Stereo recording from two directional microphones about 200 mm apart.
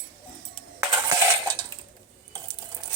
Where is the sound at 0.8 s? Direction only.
15° right (ahead or behind).